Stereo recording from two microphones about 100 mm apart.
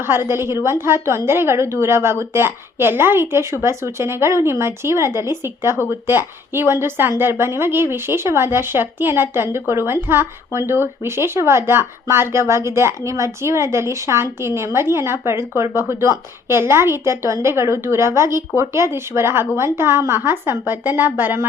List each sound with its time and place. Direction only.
0.0 s speech: 25° right (ahead or behind)